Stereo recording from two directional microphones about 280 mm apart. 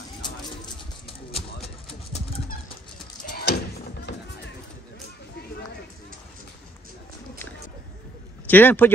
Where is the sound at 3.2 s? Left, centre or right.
Left.